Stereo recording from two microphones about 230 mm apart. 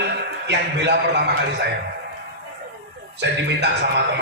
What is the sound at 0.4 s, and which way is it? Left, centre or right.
Music, right.